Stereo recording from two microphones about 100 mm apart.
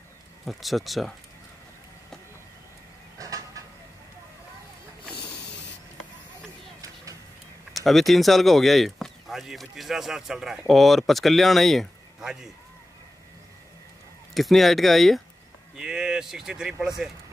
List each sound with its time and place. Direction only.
0.5 s speech: centre (ahead or behind)
7.7 s speech: centre (ahead or behind)
14.3 s speech: centre (ahead or behind)